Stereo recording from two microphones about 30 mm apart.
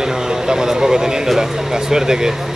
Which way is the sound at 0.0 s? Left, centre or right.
Right.